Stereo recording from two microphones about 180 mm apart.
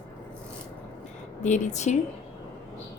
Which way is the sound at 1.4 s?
40° left (ahead or behind).